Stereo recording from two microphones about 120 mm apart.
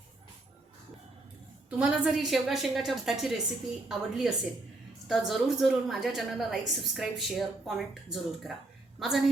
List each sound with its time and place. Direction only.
1.8 s a woman's voice: 5° right (ahead or behind)